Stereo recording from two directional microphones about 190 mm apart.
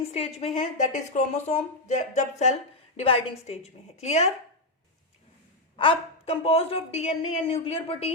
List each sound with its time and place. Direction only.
0.0 s a woman's voice: 35° left (ahead or behind)
5.7 s a woman's voice: 25° left (ahead or behind)